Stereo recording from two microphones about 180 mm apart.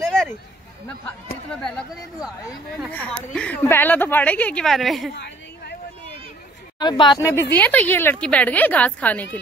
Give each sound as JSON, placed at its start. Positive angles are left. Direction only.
{"t": 2.9, "sound": "a woman's voice", "side_deg": 10}
{"t": 5.1, "sound": "a sound", "side_deg": 70}
{"t": 6.8, "sound": "speech", "side_deg": 25}